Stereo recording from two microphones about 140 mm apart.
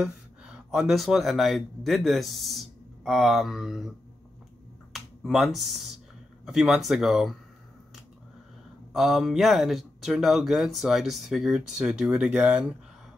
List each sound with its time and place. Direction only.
0.0 s speech: 5° right (ahead or behind)
4.9 s speech: 5° right (ahead or behind)
8.9 s speech: centre (ahead or behind)